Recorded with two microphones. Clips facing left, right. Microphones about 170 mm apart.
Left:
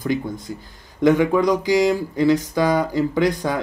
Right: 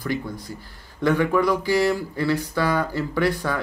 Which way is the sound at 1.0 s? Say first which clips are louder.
Left 4 dB; 15° left (ahead or behind).